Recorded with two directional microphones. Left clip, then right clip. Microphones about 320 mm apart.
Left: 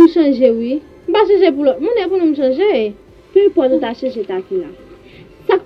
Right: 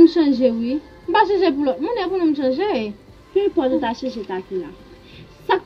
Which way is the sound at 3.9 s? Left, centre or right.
Right.